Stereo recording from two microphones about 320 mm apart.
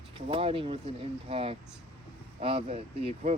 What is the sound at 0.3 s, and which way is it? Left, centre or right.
Speech, centre.